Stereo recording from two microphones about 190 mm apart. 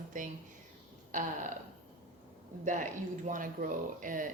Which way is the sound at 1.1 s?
40° right (ahead or behind).